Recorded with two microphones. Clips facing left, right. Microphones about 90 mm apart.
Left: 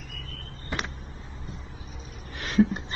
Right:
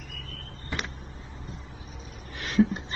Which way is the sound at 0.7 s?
20° left (ahead or behind).